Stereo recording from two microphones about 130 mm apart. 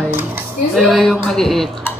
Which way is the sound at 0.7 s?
Centre (ahead or behind).